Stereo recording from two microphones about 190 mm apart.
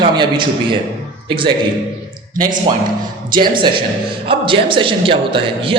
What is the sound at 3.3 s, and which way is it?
A man's voice, 25° right (ahead or behind).